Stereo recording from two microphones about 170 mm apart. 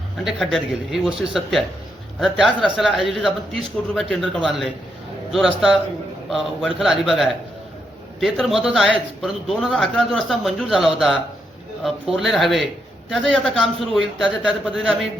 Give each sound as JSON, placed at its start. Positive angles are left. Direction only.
{"t": 0.3, "sound": "a man's voice", "side_deg": 0}